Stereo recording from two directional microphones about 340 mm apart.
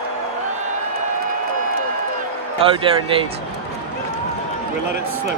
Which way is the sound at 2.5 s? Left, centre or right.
Centre.